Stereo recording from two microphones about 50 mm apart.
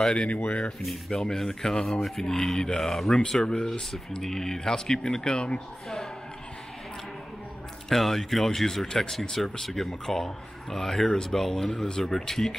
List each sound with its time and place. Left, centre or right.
0.0 s speech: centre
0.7 s speech: centre
7.9 s speech: centre